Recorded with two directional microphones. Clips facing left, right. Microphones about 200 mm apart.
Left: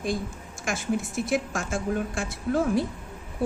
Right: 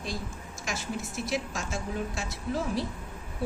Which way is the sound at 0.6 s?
50° left (ahead or behind).